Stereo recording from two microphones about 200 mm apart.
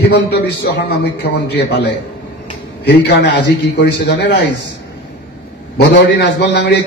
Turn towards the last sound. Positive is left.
turn(degrees=60)  # may be behind; listen again after turning